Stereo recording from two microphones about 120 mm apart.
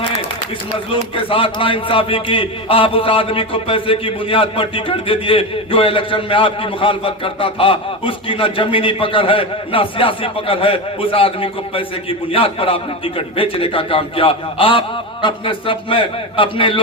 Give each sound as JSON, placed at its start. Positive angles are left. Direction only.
{"t": 1.1, "sound": "a man's voice", "side_deg": 45}